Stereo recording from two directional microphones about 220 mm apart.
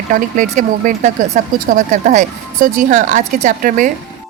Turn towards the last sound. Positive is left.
turn(degrees=-35)  # may be behind; listen again after turning